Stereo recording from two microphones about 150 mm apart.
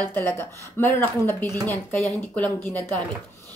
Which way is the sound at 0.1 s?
15° left (ahead or behind).